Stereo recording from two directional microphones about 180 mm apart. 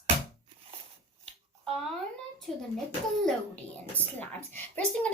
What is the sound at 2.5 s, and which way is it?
A child's voice, centre (ahead or behind).